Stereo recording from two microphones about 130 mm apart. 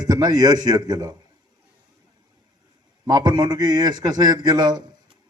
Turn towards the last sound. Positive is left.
turn(degrees=-30)  # may be behind; listen again after turning